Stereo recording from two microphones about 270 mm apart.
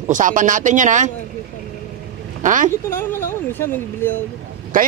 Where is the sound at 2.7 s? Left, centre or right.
Centre.